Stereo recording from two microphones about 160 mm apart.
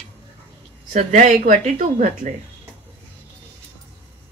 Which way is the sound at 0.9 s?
50° right (ahead or behind).